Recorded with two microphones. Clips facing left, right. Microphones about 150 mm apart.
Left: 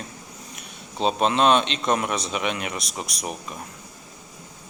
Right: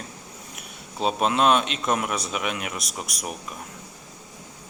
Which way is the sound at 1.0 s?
5° right (ahead or behind).